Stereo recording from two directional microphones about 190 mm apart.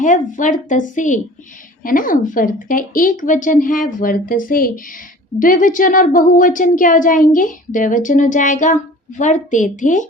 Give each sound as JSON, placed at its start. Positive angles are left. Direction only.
{"t": 0.0, "sound": "a woman's voice", "side_deg": 40}